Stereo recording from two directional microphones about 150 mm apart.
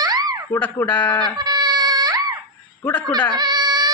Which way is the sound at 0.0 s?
25° right (ahead or behind).